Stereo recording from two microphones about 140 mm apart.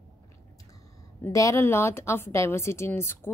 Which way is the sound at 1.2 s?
20° left (ahead or behind).